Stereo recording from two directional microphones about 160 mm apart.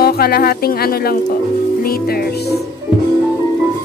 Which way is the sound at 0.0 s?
75° left (ahead or behind).